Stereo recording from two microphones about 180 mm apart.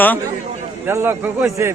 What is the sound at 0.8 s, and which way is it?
Speech, 15° right (ahead or behind).